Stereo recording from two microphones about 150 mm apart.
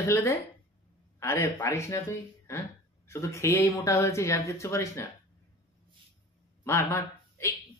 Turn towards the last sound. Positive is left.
turn(degrees=20)  # may be behind; listen again after turning